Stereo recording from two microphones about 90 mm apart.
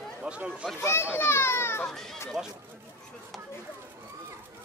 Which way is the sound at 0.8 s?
30° left (ahead or behind).